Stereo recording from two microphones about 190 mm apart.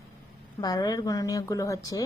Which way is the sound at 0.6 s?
20° left (ahead or behind).